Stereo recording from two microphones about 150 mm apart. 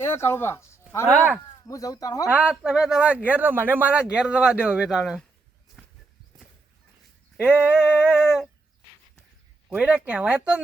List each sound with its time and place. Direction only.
0.0 s speech: 15° left (ahead or behind)
1.1 s speech: 15° right (ahead or behind)
1.6 s speech: 25° left (ahead or behind)
2.3 s speech: 10° right (ahead or behind)
7.4 s speech: 10° right (ahead or behind)
9.6 s speech: 10° right (ahead or behind)